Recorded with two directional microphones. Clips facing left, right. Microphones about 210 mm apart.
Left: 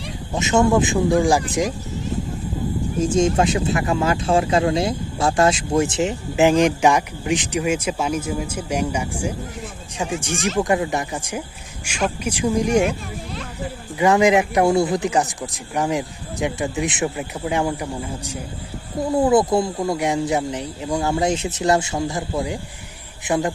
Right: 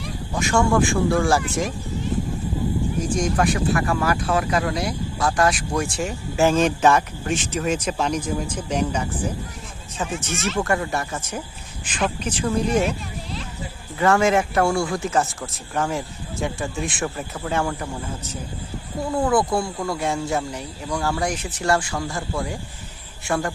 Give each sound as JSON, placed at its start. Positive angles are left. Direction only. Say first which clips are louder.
{"t": 0.3, "sound": "speech", "louder": "left 3 dB", "side_deg": 20}
{"t": 3.0, "sound": "speech", "louder": "left 6 dB", "side_deg": 25}
{"t": 14.0, "sound": "speech", "louder": "left 3 dB", "side_deg": 15}